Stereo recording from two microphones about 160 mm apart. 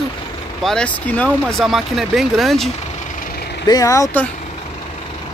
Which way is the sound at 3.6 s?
20° left (ahead or behind).